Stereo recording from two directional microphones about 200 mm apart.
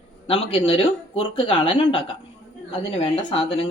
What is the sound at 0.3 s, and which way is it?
A woman's voice, 30° left (ahead or behind).